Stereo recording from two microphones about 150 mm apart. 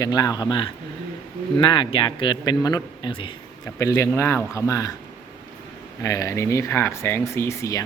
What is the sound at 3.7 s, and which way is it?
Speech, 20° left (ahead or behind).